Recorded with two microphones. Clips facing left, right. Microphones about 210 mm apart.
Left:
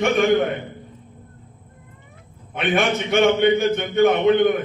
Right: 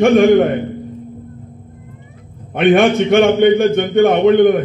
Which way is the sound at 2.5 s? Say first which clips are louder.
Right 9 dB; 55° right (ahead or behind).